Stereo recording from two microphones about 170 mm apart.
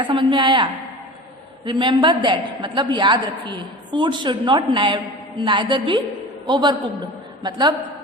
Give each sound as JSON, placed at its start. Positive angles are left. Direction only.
{"t": 0.0, "sound": "a woman's voice", "side_deg": -30}